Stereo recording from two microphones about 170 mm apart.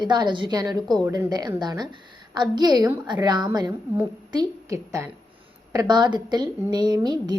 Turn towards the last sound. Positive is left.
turn(degrees=-25)  # may be behind; listen again after turning